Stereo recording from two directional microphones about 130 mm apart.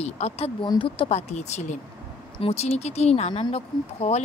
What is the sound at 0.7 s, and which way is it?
A woman's voice, 40° left (ahead or behind).